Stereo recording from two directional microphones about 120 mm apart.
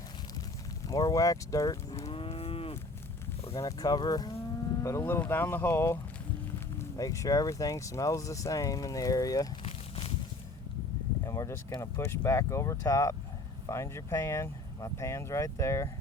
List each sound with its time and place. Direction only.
0.9 s speech: 30° left (ahead or behind)
2.0 s cattle: 55° left (ahead or behind)
3.6 s speech: 30° left (ahead or behind)
9.6 s a sound: 50° left (ahead or behind)
11.3 s a sound: 25° left (ahead or behind)
11.8 s speech: 25° left (ahead or behind)